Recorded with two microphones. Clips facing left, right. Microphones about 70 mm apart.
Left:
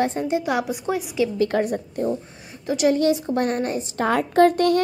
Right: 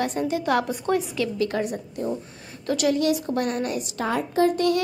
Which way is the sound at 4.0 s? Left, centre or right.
Left.